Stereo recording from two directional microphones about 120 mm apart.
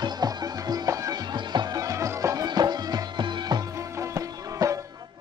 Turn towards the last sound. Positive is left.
turn(degrees=-25)  # may be behind; listen again after turning